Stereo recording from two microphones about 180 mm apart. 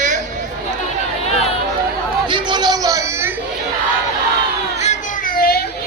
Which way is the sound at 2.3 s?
25° right (ahead or behind).